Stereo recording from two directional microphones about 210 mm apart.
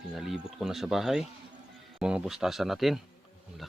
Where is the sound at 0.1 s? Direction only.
Centre (ahead or behind).